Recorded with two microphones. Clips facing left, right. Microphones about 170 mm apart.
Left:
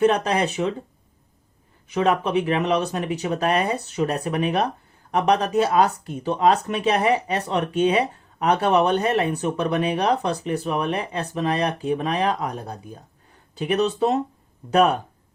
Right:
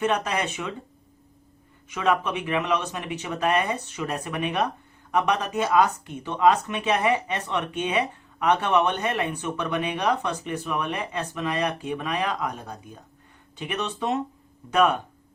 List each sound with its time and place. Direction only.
0.0 s speech: 35° left (ahead or behind)
1.9 s speech: 35° left (ahead or behind)